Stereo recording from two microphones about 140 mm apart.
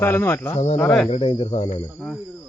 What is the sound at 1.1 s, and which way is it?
Speech, 40° left (ahead or behind).